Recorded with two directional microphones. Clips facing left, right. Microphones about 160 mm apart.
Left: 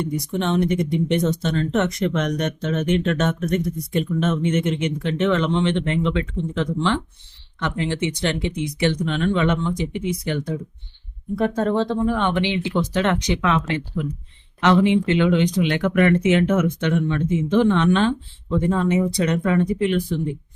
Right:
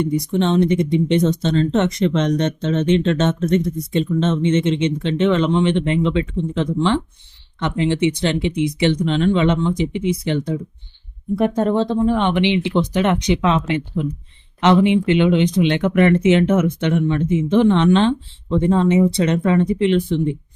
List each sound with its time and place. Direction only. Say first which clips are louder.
0.0 s speech: right 5 dB; 20° right (ahead or behind)